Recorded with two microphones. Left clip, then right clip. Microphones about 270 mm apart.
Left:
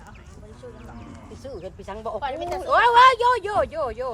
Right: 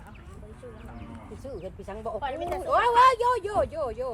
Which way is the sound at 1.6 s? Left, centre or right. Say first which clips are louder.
Left 4 dB; centre.